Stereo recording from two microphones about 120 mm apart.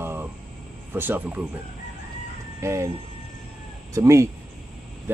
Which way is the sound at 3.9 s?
25° right (ahead or behind).